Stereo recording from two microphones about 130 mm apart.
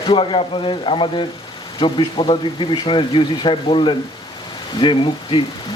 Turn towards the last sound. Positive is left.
turn(degrees=40)  # may be behind; listen again after turning